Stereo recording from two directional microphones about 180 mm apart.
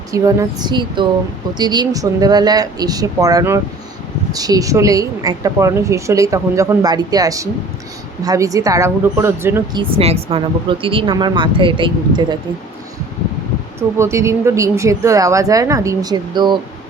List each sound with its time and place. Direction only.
0.1 s a woman's voice: 20° right (ahead or behind)
9.7 s a woman's voice: 35° right (ahead or behind)
14.0 s a woman's voice: 15° right (ahead or behind)